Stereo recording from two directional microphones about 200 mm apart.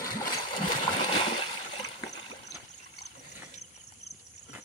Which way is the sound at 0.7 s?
25° left (ahead or behind).